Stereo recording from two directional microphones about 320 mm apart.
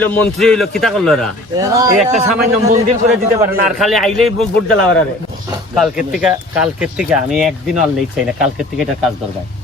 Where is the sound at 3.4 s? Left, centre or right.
Centre.